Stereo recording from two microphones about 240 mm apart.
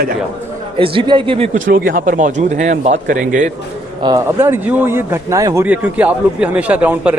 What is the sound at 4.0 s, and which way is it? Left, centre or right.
Speech, centre.